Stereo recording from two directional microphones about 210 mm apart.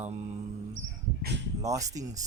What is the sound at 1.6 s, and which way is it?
Speech, 15° right (ahead or behind).